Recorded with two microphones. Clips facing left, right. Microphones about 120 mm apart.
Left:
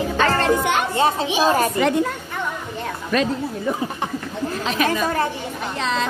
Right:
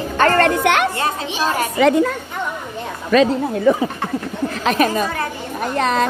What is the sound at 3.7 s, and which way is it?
Speech, 90° right.